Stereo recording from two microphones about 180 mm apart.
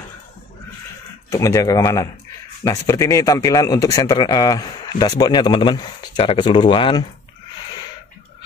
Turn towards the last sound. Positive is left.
turn(degrees=30)  # may be behind; listen again after turning